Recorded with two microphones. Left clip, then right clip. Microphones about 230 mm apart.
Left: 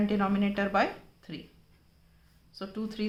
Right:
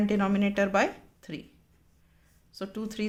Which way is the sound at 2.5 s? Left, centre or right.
Right.